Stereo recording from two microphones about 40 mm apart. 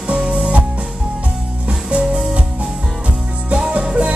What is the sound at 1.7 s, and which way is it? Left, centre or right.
Music, right.